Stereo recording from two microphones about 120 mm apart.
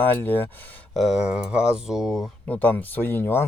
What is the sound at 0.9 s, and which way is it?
Speech, centre (ahead or behind).